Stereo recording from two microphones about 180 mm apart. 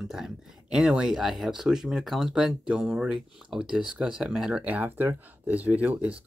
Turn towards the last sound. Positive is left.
turn(degrees=-10)  # may be behind; listen again after turning